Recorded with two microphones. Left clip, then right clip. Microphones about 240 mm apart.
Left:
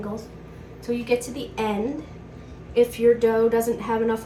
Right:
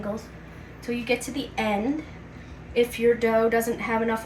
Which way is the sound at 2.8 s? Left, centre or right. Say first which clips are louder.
Left 3 dB; centre.